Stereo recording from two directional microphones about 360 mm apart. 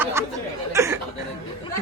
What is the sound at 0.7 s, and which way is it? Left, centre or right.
Chuckle, centre.